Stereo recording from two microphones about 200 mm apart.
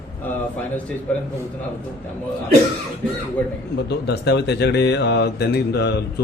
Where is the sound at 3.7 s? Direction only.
55° left (ahead or behind).